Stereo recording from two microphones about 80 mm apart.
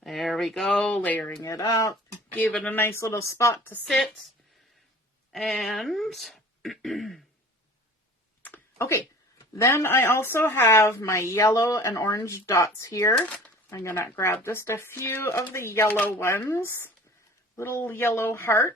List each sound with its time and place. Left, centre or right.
0.0 s speech: centre
0.9 s speech: centre
1.4 s speech: left
2.3 s speech: centre
3.8 s speech: centre
5.3 s speech: centre
8.4 s a sound: left
9.6 s speech: left
13.1 s speech: centre
13.7 s speech: left
15.9 s speech: left
16.2 s speech: left